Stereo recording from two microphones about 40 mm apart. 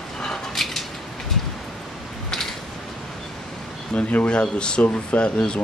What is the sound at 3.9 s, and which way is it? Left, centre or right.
Speech, left.